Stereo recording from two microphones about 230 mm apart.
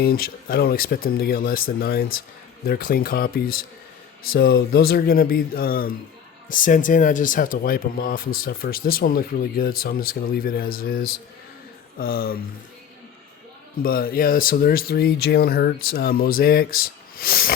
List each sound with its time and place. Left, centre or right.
0.0 s speech: left
13.8 s speech: left